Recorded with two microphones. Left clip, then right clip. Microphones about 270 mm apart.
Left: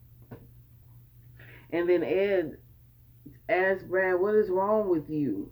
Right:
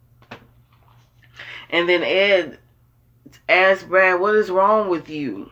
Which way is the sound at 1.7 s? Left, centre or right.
Centre.